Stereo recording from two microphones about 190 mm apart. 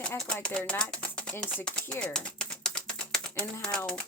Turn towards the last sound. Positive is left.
turn(degrees=5)  # may be behind; listen again after turning